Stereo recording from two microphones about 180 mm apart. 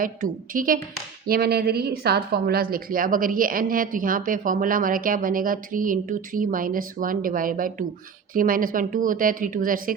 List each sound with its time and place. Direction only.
0.0 s a woman's voice: 50° right (ahead or behind)
1.3 s a woman's voice: 60° right (ahead or behind)